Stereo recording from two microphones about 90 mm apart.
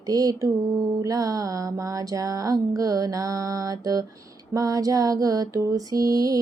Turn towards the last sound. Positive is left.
turn(degrees=-40)  # may be behind; listen again after turning